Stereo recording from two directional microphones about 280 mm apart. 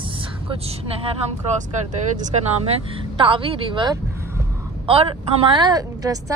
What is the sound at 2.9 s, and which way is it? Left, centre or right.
Vehicle, centre.